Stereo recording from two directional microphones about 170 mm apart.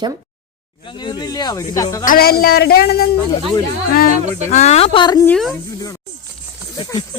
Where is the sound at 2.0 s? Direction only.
55° left (ahead or behind).